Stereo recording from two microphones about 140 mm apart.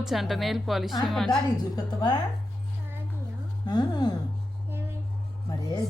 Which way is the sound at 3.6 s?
30° left (ahead or behind).